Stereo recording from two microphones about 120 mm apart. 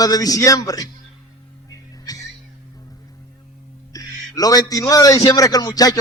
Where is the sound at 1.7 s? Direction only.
30° left (ahead or behind).